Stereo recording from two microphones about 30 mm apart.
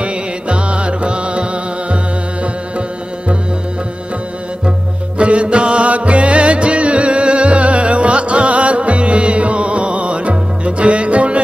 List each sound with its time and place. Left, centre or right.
0.0 s music: right
5.2 s music: right